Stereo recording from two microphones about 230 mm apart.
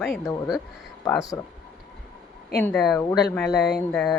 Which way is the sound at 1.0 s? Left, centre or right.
Centre.